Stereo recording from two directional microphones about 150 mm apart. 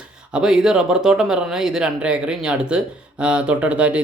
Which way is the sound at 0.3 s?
5° right (ahead or behind).